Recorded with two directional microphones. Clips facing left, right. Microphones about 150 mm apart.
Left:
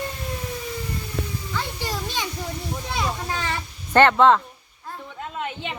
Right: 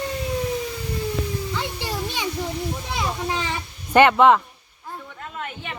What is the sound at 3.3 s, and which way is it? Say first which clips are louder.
Cat: right 1 dB; 15° right (ahead or behind).